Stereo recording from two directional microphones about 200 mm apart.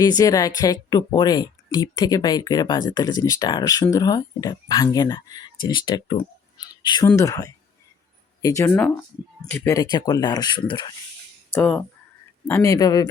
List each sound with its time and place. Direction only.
0.0 s speech: 20° left (ahead or behind)
11.5 s speech: 10° left (ahead or behind)